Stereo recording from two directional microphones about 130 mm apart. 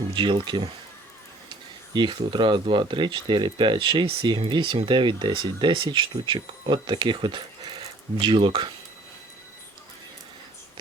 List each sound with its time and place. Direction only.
0.1 s speech: 40° right (ahead or behind)